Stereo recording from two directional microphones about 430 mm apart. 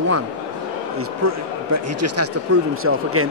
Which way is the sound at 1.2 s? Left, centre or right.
Right.